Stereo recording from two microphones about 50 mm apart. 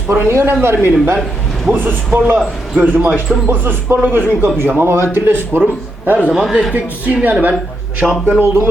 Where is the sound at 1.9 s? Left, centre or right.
Right.